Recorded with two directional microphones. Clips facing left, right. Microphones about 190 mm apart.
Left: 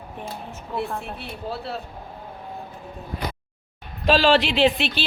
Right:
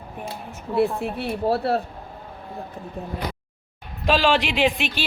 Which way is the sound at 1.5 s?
65° right (ahead or behind).